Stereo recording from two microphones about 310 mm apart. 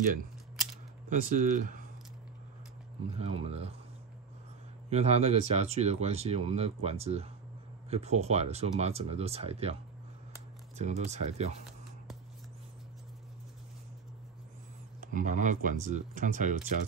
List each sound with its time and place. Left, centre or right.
1.1 s speech: right
3.2 s speech: centre
4.8 s speech: centre
10.8 s speech: right
15.0 s speech: right